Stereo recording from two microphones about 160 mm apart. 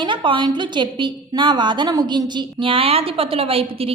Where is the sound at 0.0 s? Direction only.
30° right (ahead or behind).